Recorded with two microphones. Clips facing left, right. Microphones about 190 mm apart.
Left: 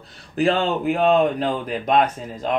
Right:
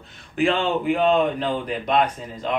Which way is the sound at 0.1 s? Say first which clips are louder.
Left 2 dB; 35° left (ahead or behind).